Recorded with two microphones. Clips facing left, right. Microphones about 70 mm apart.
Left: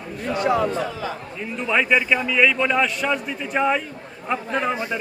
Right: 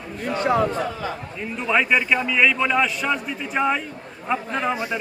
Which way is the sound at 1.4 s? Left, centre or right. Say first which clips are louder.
Even; centre.